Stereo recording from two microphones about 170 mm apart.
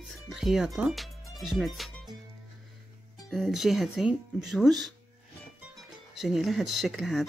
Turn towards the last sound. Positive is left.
turn(degrees=0)  # may be behind; listen again after turning